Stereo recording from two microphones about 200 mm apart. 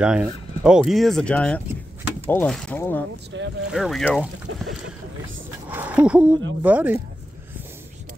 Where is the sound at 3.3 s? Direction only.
65° right (ahead or behind).